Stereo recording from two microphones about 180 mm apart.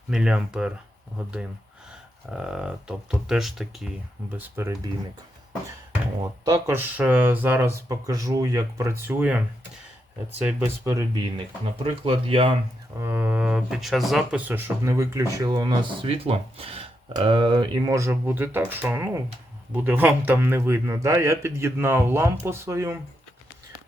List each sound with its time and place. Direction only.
0.1 s speech: 5° right (ahead or behind)
2.3 s speech: 5° right (ahead or behind)
6.4 s speech: 15° right (ahead or behind)
11.6 s speech: 30° right (ahead or behind)
13.0 s speech: 10° right (ahead or behind)